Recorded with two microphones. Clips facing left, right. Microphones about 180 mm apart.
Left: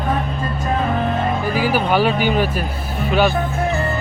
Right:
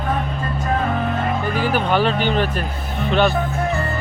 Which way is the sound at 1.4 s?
10° left (ahead or behind).